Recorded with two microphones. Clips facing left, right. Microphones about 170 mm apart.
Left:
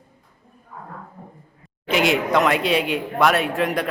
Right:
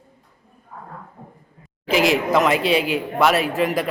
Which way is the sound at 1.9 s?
Centre (ahead or behind).